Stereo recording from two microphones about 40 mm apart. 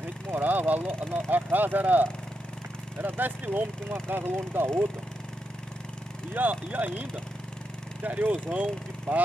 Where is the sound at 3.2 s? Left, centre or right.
Right.